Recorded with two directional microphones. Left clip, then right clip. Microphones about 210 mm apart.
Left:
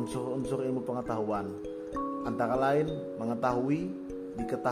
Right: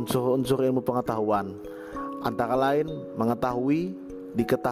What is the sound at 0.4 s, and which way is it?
A man's voice, 50° right (ahead or behind).